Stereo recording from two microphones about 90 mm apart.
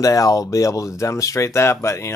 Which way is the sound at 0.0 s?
40° left (ahead or behind).